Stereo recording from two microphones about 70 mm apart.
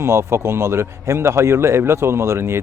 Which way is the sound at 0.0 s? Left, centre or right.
Right.